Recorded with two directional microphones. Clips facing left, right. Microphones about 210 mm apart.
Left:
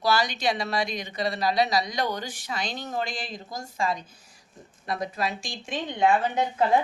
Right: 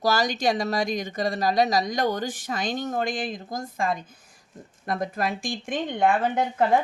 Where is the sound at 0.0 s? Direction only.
45° right (ahead or behind).